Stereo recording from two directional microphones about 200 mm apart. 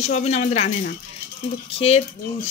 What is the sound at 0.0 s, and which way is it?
Speech, 35° left (ahead or behind).